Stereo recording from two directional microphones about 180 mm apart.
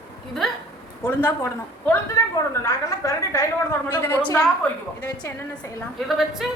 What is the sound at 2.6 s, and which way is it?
A woman's voice, 15° left (ahead or behind).